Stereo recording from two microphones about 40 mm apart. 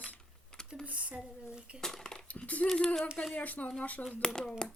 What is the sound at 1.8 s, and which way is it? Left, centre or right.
Speech, centre.